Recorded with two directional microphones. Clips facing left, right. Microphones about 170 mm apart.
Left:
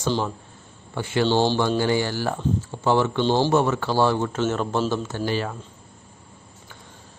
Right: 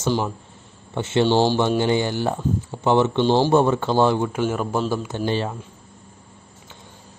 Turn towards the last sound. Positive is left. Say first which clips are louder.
# right 2 dB
turn(degrees=-20)  # may be behind; listen again after turning